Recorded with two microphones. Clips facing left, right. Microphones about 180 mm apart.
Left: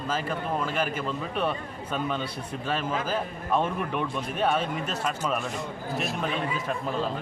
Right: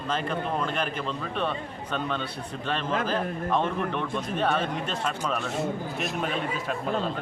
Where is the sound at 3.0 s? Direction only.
5° left (ahead or behind).